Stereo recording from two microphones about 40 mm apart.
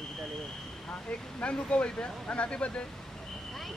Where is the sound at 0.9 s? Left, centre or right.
Left.